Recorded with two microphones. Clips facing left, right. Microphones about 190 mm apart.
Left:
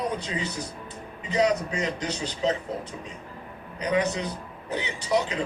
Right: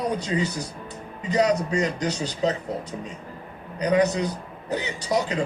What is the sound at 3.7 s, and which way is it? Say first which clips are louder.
A man's voice: right 5 dB; 40° right (ahead or behind).